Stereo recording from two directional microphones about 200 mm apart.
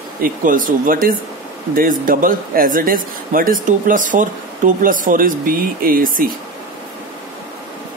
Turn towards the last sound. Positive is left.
turn(degrees=-45)  # may be behind; listen again after turning